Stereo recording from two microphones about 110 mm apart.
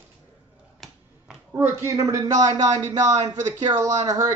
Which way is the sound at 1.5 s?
20° right (ahead or behind).